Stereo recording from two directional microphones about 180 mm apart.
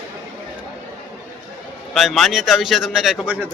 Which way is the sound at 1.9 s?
Centre (ahead or behind).